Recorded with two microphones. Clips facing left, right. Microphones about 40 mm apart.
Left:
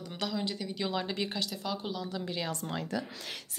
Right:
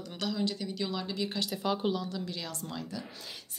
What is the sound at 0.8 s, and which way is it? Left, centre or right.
Speech, left.